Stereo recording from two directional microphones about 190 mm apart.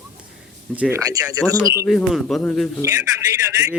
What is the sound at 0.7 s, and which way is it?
Speech, 10° right (ahead or behind).